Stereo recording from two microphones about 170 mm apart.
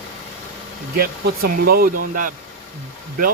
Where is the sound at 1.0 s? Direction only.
65° right (ahead or behind).